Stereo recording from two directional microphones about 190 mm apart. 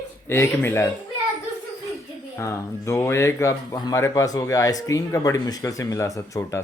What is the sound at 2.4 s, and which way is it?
Speech, 15° left (ahead or behind).